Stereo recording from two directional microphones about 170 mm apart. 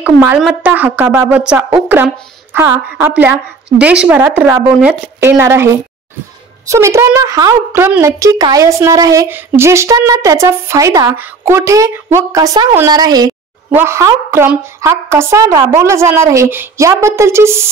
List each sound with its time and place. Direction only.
0.0 s a woman's voice: 10° right (ahead or behind)